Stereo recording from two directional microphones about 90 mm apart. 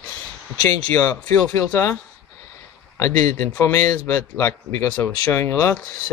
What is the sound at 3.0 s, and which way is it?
Speech, 30° left (ahead or behind).